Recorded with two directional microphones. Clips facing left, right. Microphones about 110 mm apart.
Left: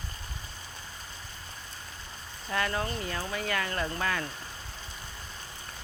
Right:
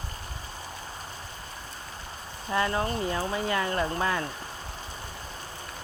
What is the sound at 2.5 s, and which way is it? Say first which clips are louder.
Speech: right 4 dB; 25° right (ahead or behind).